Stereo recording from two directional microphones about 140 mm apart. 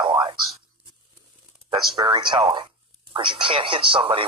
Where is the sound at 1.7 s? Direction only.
30° right (ahead or behind).